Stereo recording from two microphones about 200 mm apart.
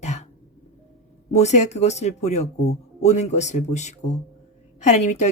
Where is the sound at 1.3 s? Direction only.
35° left (ahead or behind).